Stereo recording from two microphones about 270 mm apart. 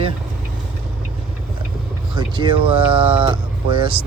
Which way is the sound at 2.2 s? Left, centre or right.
Centre.